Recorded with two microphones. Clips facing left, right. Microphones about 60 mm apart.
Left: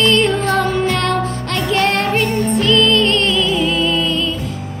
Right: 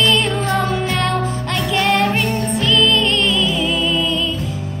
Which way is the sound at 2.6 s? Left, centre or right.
Left.